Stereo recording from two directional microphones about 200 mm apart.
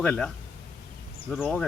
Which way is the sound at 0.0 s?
5° left (ahead or behind).